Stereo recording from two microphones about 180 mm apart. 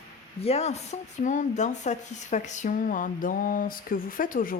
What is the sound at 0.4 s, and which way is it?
Speech, 35° left (ahead or behind).